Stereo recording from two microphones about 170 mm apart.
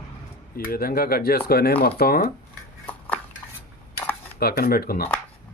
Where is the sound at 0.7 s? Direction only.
60° left (ahead or behind).